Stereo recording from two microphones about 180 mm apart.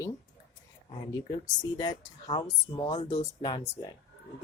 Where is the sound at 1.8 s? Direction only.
25° left (ahead or behind).